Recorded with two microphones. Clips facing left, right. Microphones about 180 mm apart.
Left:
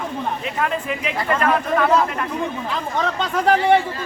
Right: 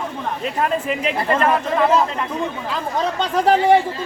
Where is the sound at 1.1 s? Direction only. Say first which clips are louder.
Right 1 dB; 30° right (ahead or behind).